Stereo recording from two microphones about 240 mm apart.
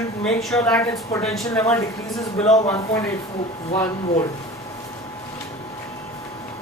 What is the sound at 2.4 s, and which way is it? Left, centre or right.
Speech, left.